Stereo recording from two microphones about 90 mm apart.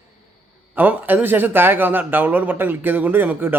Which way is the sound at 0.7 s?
20° right (ahead or behind).